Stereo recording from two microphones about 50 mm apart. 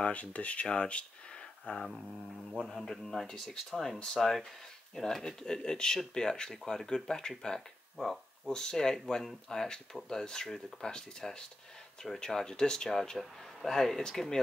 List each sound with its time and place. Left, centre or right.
0.0 s speech: left
2.7 s speech: centre